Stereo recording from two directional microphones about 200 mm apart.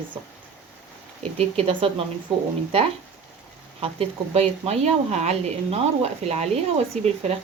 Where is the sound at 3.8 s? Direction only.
30° right (ahead or behind).